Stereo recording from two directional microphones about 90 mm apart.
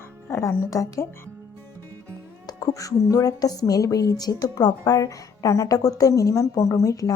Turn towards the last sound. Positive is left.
turn(degrees=40)  # may be behind; listen again after turning